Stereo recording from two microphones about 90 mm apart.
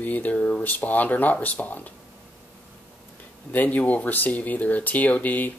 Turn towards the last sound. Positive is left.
turn(degrees=20)  # may be behind; listen again after turning